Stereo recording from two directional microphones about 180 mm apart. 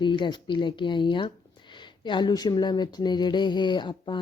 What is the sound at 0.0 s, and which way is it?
Speech, 25° left (ahead or behind).